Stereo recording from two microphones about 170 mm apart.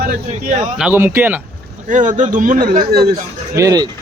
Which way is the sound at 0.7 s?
10° right (ahead or behind).